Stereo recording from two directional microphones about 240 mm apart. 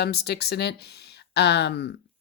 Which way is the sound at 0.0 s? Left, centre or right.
Left.